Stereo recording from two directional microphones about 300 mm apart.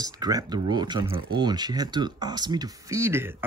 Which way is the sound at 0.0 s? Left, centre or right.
Centre.